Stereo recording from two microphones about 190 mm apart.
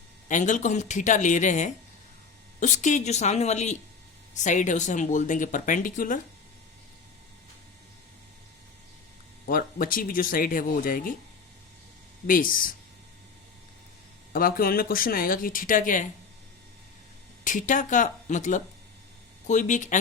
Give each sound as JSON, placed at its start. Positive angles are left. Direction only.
{"t": 0.3, "sound": "speech", "side_deg": 40}
{"t": 9.5, "sound": "speech", "side_deg": 50}
{"t": 12.3, "sound": "speech", "side_deg": 50}
{"t": 14.3, "sound": "speech", "side_deg": 50}
{"t": 17.4, "sound": "speech", "side_deg": 45}